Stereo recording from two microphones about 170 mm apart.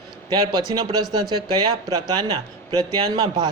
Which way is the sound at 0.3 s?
25° right (ahead or behind).